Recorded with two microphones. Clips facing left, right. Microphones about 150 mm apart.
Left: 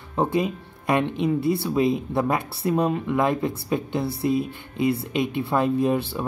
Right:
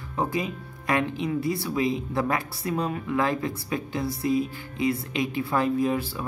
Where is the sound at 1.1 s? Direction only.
60° left (ahead or behind).